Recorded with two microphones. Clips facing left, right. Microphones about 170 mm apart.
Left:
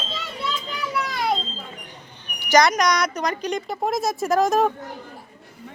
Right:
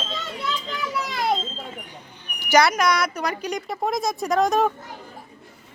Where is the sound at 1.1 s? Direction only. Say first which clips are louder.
Right 1 dB; centre (ahead or behind).